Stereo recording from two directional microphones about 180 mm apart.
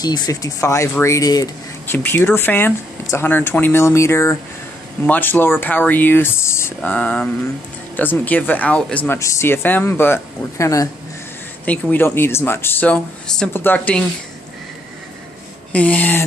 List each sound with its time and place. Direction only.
0.0 s speech: 20° left (ahead or behind)
15.7 s speech: 5° left (ahead or behind)